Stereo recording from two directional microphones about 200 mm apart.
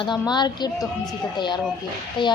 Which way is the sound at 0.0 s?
20° left (ahead or behind).